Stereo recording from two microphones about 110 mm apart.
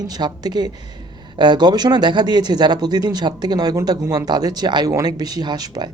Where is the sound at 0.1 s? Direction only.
40° right (ahead or behind).